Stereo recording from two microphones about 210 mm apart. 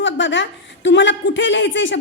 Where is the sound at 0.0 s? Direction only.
60° left (ahead or behind).